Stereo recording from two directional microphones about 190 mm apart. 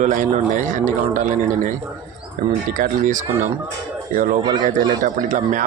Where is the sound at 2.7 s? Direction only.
40° right (ahead or behind).